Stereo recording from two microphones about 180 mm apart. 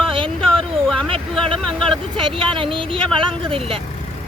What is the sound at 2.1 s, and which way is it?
Speech, 30° right (ahead or behind).